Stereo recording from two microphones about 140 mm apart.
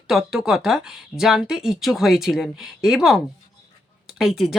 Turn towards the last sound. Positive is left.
turn(degrees=0)  # may be behind; listen again after turning